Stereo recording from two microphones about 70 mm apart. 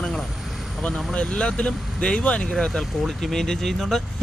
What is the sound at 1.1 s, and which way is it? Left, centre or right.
Speech, centre.